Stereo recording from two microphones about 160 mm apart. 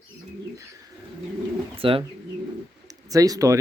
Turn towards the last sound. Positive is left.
turn(degrees=-20)  # may be behind; listen again after turning